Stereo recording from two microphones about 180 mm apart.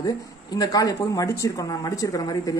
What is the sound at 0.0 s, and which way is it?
A woman's voice, 20° left (ahead or behind).